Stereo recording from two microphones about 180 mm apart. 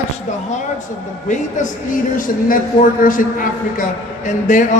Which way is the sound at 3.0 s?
50° left (ahead or behind).